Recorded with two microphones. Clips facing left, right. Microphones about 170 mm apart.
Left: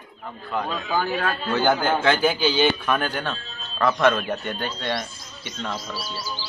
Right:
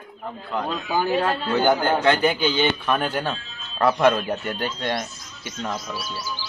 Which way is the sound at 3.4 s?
35° left (ahead or behind).